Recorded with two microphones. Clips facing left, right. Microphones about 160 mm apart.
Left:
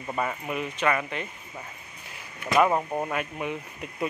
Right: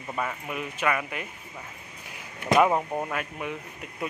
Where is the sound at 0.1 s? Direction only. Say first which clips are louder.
Left 2 dB; 5° left (ahead or behind).